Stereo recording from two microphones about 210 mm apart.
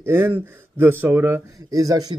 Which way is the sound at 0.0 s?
10° right (ahead or behind).